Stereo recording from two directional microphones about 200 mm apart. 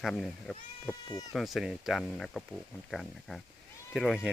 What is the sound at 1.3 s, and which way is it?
Speech, centre (ahead or behind).